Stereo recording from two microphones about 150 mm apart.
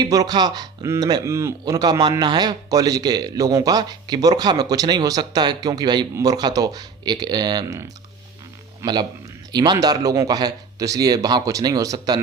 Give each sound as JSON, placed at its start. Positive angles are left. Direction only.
{"t": 0.0, "sound": "a man's voice", "side_deg": -25}